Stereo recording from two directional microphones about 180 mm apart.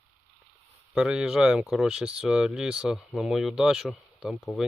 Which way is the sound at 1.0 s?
5° right (ahead or behind).